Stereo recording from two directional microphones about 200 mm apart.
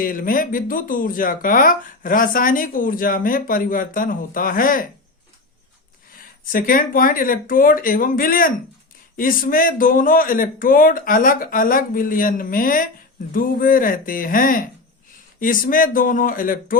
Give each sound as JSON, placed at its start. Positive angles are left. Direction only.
{"t": 0.0, "sound": "speech", "side_deg": 45}
{"t": 6.5, "sound": "speech", "side_deg": 45}